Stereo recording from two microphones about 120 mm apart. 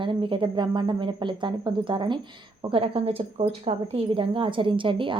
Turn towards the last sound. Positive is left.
turn(degrees=-45)  # may be behind; listen again after turning